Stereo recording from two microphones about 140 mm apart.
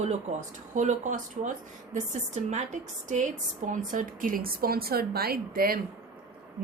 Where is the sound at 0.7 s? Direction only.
60° right (ahead or behind).